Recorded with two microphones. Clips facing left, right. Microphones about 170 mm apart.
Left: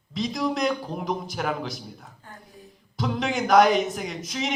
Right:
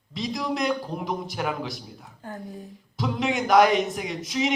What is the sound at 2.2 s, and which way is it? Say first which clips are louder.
Speech: right 10 dB; 45° right (ahead or behind).